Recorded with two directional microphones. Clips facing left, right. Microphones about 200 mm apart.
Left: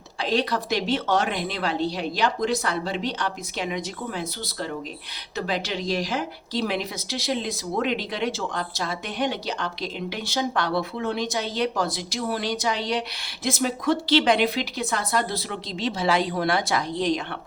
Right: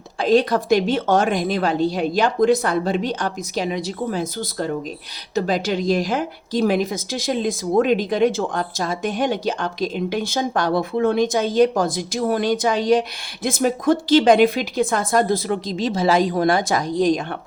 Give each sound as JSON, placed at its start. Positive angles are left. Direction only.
{"t": 0.2, "sound": "speech", "side_deg": -50}